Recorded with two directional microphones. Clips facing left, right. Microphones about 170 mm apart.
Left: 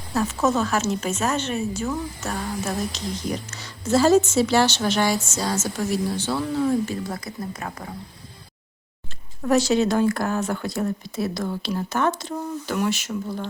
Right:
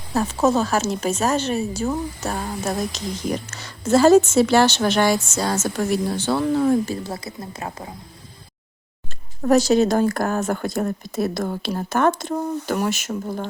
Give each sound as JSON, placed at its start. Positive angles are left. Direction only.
{"t": 0.1, "sound": "speech", "side_deg": -30}
{"t": 3.5, "sound": "a woman's voice", "side_deg": -50}
{"t": 6.9, "sound": "speech", "side_deg": -30}
{"t": 9.4, "sound": "speech", "side_deg": -40}